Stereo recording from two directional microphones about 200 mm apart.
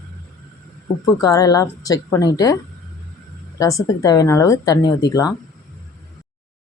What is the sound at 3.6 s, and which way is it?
Speech, 15° left (ahead or behind).